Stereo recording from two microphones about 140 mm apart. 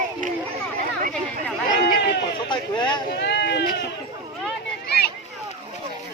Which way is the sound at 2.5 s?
35° left (ahead or behind).